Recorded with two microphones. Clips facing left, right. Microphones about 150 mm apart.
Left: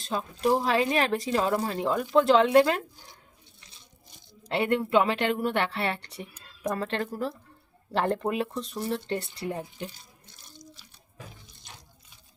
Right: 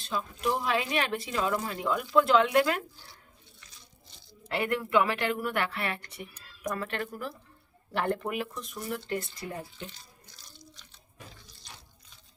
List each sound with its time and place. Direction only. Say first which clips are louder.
0.0 s speech: left 4 dB; 40° left (ahead or behind)
4.4 s a woman's voice: left 4 dB; 30° left (ahead or behind)
9.8 s water: left 5 dB; 25° left (ahead or behind)